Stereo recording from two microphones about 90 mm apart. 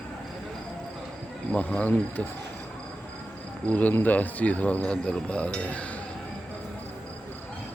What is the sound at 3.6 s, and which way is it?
A man's voice, 15° left (ahead or behind).